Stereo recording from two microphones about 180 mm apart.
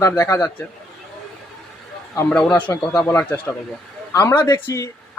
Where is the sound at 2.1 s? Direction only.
10° left (ahead or behind).